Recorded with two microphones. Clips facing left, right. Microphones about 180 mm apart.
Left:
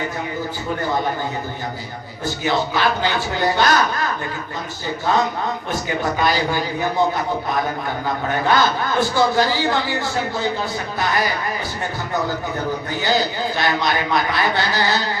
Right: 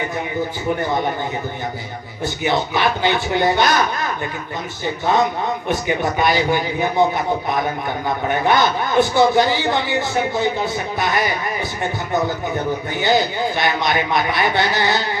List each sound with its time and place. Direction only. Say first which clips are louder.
2.2 s speech: right 1 dB; 20° right (ahead or behind)
5.6 s speech: right 4 dB; 20° right (ahead or behind)
8.3 s speech: right 1 dB; 20° right (ahead or behind)
12.9 s speech: right 3 dB; 20° right (ahead or behind)